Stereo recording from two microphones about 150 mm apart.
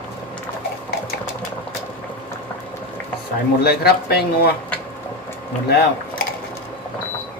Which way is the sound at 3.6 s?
90° left.